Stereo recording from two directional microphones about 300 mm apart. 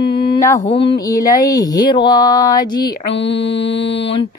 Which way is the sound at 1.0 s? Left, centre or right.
Centre.